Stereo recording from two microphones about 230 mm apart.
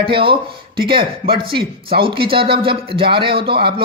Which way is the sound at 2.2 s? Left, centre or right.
Right.